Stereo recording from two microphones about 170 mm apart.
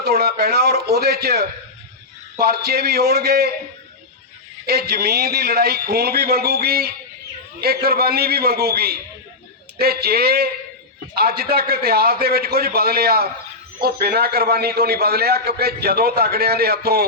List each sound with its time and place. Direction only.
0.0 s a man's voice: 65° right (ahead or behind)
4.6 s a man's voice: 70° right (ahead or behind)